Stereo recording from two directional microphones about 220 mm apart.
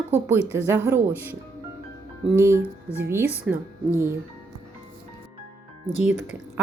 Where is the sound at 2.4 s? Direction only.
10° right (ahead or behind).